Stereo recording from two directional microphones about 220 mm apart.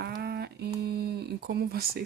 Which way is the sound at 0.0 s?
45° right (ahead or behind).